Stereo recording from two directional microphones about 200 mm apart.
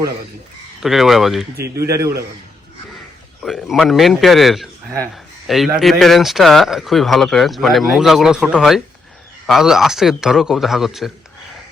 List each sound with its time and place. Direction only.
0.8 s speech: centre (ahead or behind)
1.5 s speech: 50° right (ahead or behind)
3.4 s speech: centre (ahead or behind)